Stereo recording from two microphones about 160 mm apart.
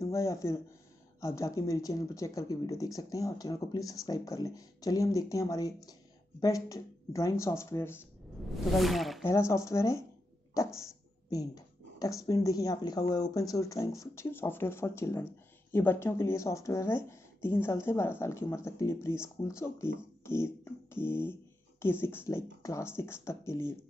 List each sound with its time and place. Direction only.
0.0 s speech: 20° left (ahead or behind)
8.7 s speech: centre (ahead or behind)
9.2 s speech: 20° left (ahead or behind)
20.2 s a sound: 15° left (ahead or behind)
21.8 s speech: 15° left (ahead or behind)